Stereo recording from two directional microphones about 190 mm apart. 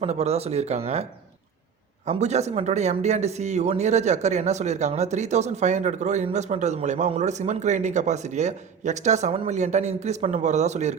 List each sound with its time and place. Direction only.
0.0 s speech: 35° right (ahead or behind)
2.0 s speech: 35° right (ahead or behind)